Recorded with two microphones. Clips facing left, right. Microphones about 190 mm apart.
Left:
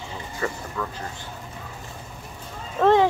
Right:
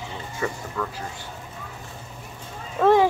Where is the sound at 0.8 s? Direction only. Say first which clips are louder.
Right 1 dB; centre (ahead or behind).